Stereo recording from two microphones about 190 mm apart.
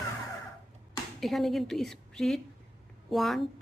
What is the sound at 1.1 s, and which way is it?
A woman's voice, centre (ahead or behind).